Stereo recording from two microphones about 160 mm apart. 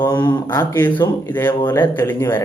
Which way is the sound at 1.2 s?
10° left (ahead or behind).